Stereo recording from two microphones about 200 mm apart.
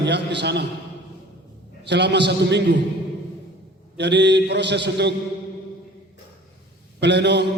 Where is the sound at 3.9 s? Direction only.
60° right (ahead or behind).